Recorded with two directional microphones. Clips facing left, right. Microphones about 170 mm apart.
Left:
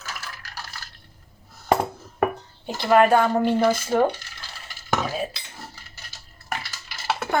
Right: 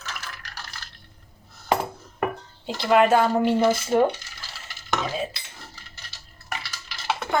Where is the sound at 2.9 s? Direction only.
15° right (ahead or behind).